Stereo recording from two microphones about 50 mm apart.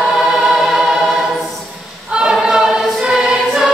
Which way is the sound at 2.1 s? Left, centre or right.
Centre.